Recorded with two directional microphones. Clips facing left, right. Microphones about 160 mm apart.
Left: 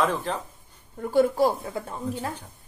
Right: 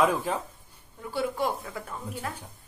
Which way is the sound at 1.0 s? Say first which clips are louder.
Left 8 dB; 45° left (ahead or behind).